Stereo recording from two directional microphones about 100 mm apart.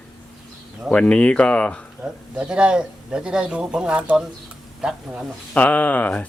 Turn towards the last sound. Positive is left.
turn(degrees=15)  # may be behind; listen again after turning